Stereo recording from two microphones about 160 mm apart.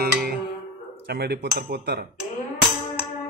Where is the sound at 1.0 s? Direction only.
90° right.